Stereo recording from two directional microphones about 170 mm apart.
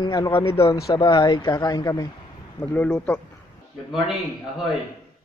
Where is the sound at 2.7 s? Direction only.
5° left (ahead or behind).